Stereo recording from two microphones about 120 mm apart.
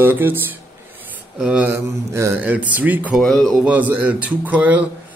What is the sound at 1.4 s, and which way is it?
Speech, 10° right (ahead or behind).